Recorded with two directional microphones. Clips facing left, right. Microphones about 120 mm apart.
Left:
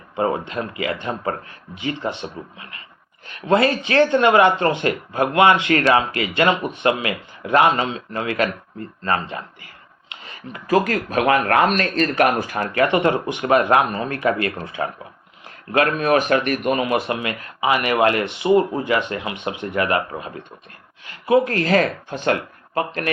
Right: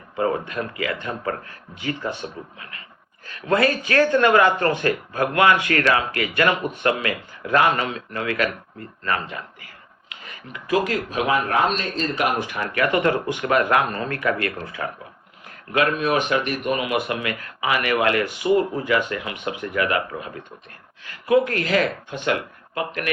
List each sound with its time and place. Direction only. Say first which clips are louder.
0.2 s speech: left 1 dB; 25° left (ahead or behind)
10.1 s a sound: left 3 dB; 30° left (ahead or behind)
10.7 s speech: left 3 dB; 50° left (ahead or behind)
12.5 s speech: left 3 dB; 40° left (ahead or behind)
12.8 s speech: left 2 dB; 25° left (ahead or behind)
15.4 s speech: left 2 dB; 35° left (ahead or behind)